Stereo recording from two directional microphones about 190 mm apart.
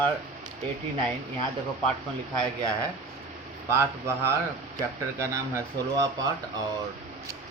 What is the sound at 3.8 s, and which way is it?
Speech, 15° right (ahead or behind).